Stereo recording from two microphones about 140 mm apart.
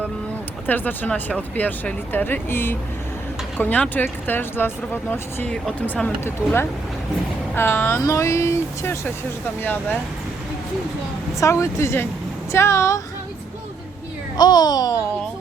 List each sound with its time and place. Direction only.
0.7 s speech: 10° left (ahead or behind)
11.3 s speech: 20° left (ahead or behind)
14.3 s speech: 30° left (ahead or behind)